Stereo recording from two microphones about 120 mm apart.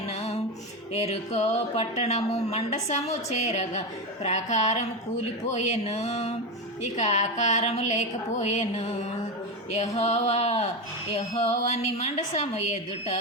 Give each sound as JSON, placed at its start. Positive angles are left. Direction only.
{"t": 0.1, "sound": "music", "side_deg": 60}
{"t": 0.9, "sound": "a woman's voice", "side_deg": 65}